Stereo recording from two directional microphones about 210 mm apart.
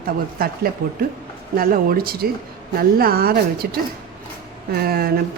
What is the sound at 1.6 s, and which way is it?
Speech, 45° right (ahead or behind).